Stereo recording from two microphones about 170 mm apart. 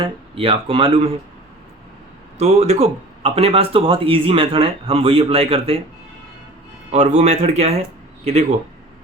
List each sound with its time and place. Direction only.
0.0 s speech: 35° right (ahead or behind)
2.4 s speech: 40° right (ahead or behind)
6.9 s speech: 45° right (ahead or behind)